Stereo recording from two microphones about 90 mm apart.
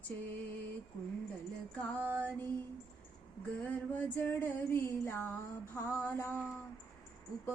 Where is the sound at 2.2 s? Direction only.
20° left (ahead or behind).